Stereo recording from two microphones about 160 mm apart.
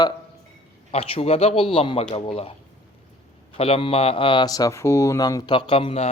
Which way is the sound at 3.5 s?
35° left (ahead or behind).